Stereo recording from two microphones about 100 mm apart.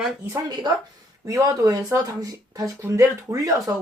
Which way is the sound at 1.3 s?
35° right (ahead or behind).